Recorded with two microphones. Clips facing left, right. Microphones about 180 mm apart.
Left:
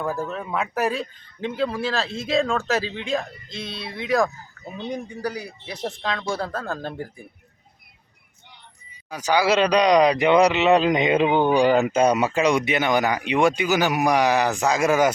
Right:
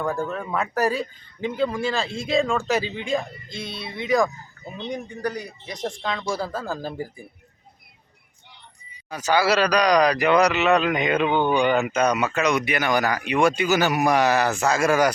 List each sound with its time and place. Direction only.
0.0 s speech: centre (ahead or behind)
9.0 s speech: 10° left (ahead or behind)